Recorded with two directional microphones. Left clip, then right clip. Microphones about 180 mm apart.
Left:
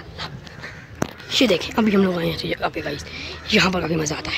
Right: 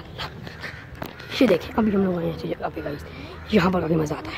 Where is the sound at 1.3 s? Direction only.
5° right (ahead or behind).